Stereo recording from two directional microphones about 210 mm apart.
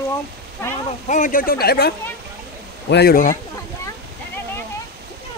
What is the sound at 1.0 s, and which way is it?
Speech, 35° left (ahead or behind).